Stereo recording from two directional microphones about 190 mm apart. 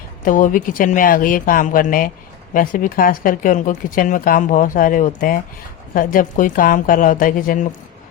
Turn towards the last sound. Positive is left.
turn(degrees=45)  # may be behind; listen again after turning